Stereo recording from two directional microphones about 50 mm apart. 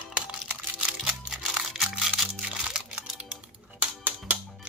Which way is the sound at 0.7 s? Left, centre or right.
Right.